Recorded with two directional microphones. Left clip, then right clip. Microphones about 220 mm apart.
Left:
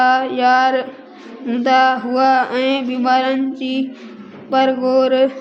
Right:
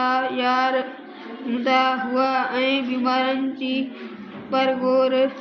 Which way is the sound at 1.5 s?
55° left (ahead or behind).